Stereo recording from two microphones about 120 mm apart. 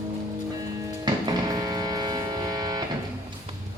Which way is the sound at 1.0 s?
35° right (ahead or behind).